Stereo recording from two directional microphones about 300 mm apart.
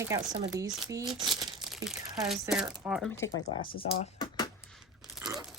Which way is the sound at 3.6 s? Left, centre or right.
Left.